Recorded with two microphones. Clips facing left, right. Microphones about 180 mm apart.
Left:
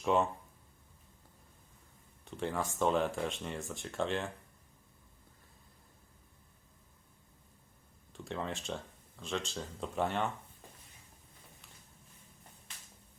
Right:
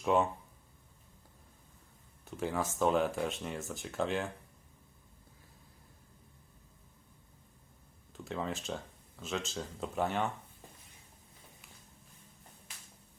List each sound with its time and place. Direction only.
0.0 s speech: centre (ahead or behind)
2.2 s speech: 5° right (ahead or behind)
8.1 s speech: centre (ahead or behind)